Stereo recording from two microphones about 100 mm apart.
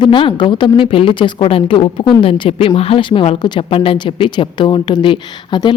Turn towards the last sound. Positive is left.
turn(degrees=55)  # may be behind; listen again after turning